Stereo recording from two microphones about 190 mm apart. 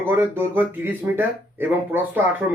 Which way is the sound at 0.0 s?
10° right (ahead or behind).